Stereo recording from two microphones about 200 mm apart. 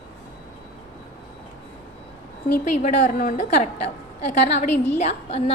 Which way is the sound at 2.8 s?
35° left (ahead or behind).